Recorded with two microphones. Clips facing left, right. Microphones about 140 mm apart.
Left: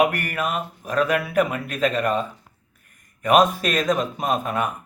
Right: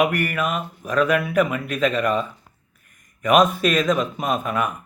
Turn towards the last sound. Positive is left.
turn(degrees=35)  # may be behind; listen again after turning